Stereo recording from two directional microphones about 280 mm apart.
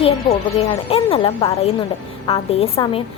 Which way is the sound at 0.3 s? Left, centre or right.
Left.